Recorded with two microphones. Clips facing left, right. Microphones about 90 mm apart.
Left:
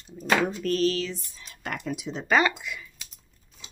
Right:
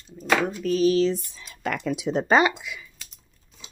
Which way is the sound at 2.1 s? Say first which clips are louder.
Right 14 dB; 65° right (ahead or behind).